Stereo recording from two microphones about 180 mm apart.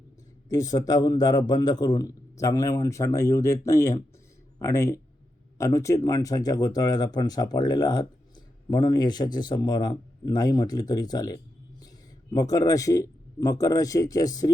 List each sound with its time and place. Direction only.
0.5 s a man's voice: 20° left (ahead or behind)